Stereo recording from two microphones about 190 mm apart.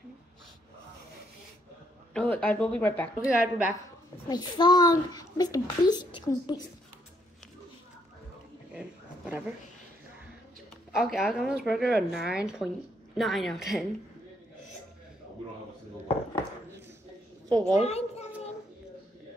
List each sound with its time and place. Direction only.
2.1 s speech: 10° left (ahead or behind)
3.3 s a woman's voice: 5° right (ahead or behind)
4.3 s a child's voice: 20° left (ahead or behind)
8.7 s a sound: 5° right (ahead or behind)
11.0 s speech: centre (ahead or behind)
17.5 s a woman's voice: 15° right (ahead or behind)
17.8 s a sound: 35° left (ahead or behind)